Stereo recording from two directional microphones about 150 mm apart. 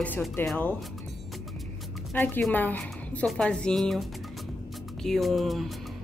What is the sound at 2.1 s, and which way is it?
Speech, 10° left (ahead or behind).